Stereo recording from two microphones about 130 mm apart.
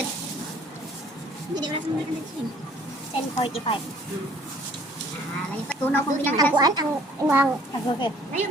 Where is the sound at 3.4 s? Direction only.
45° left (ahead or behind).